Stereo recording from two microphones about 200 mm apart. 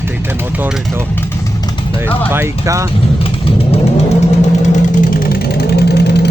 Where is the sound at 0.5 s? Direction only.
10° right (ahead or behind).